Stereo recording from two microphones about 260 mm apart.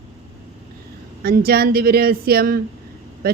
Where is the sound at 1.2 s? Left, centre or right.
Right.